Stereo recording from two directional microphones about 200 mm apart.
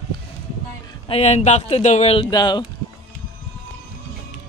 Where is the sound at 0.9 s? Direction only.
30° left (ahead or behind).